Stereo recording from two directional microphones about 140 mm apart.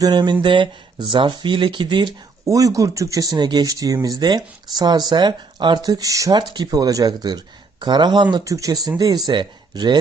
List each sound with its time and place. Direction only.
0.0 s speech: 30° right (ahead or behind)